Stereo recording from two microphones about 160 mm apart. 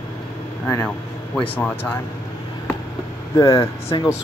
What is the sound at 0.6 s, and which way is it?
Speech, 15° left (ahead or behind).